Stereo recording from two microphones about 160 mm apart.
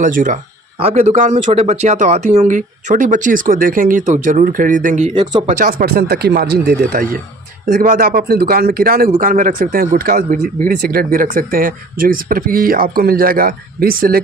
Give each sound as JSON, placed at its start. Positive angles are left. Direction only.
{"t": 0.0, "sound": "speech", "side_deg": -55}
{"t": 0.8, "sound": "speech", "side_deg": -40}
{"t": 5.5, "sound": "speech", "side_deg": -60}
{"t": 9.1, "sound": "speech", "side_deg": -55}